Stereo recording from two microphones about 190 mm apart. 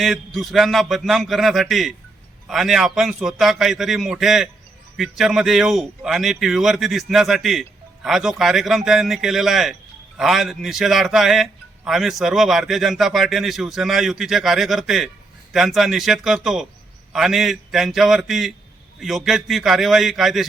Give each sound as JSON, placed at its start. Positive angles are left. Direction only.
{"t": 0.0, "sound": "a man's voice", "side_deg": 0}